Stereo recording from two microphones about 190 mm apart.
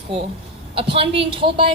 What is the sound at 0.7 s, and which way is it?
Speech, 30° right (ahead or behind).